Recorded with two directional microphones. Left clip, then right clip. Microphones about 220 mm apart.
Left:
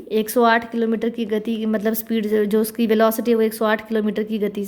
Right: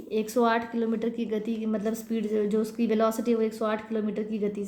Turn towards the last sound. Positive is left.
turn(degrees=40)  # may be behind; listen again after turning